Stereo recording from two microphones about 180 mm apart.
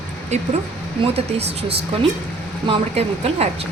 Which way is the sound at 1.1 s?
35° right (ahead or behind).